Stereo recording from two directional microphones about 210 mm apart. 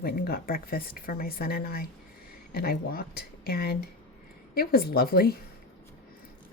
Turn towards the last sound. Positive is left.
turn(degrees=45)  # may be behind; listen again after turning